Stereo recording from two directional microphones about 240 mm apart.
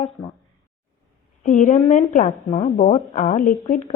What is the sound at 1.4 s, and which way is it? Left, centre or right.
A woman's voice, left.